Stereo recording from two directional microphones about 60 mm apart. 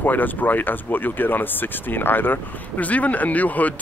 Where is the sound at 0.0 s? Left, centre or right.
Left.